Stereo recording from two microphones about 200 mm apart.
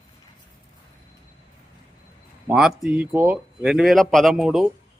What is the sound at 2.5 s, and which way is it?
A man's voice, centre (ahead or behind).